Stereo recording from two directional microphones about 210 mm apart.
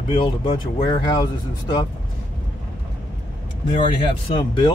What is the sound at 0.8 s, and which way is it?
Speech, 20° left (ahead or behind).